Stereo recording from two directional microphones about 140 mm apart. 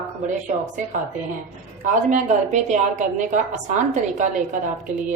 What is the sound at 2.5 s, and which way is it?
A woman's voice, 60° right (ahead or behind).